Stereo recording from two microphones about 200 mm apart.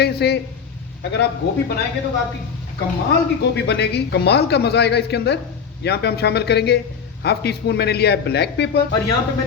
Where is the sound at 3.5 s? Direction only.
55° left (ahead or behind).